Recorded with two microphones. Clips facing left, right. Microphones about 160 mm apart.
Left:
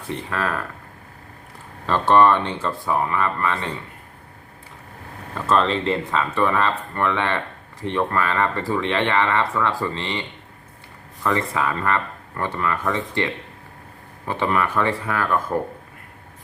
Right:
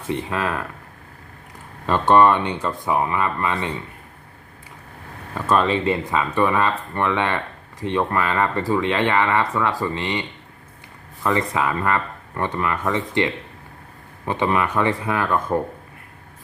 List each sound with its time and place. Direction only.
0.1 s speech: 15° right (ahead or behind)
1.9 s speech: 15° right (ahead or behind)
5.5 s speech: 10° right (ahead or behind)